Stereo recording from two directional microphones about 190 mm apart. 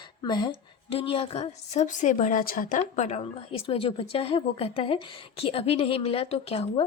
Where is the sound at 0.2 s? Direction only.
25° left (ahead or behind).